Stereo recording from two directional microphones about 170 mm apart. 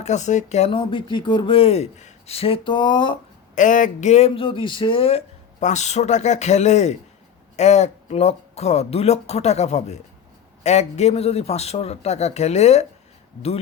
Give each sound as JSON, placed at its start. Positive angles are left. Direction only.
{"t": 0.0, "sound": "speech", "side_deg": 45}
{"t": 3.5, "sound": "speech", "side_deg": 50}